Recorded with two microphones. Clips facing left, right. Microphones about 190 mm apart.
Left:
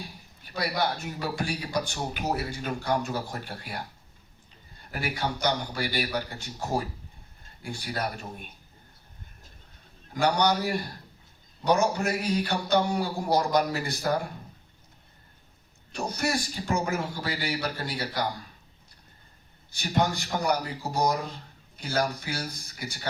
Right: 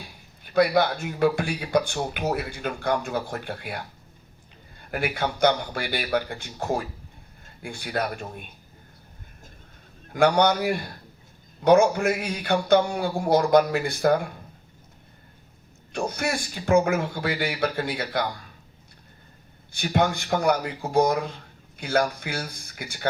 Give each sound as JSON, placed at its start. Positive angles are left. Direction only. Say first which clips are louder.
{"t": 0.5, "sound": "a man's voice", "louder": "right 8 dB", "side_deg": -55}
{"t": 5.1, "sound": "a man's voice", "louder": "right 6 dB", "side_deg": -55}
{"t": 10.1, "sound": "a man's voice", "louder": "right 5 dB", "side_deg": -55}
{"t": 15.9, "sound": "a man's voice", "louder": "right 2 dB", "side_deg": -55}
{"t": 19.7, "sound": "a man's voice", "louder": "right 3 dB", "side_deg": -55}